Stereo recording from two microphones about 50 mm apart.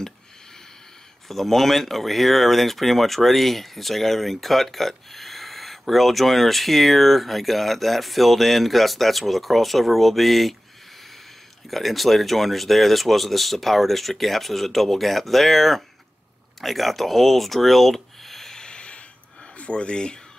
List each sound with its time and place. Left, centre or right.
1.3 s speech: centre
11.7 s speech: centre
16.6 s a sound: centre; by 19.0 s left
19.5 s speech: left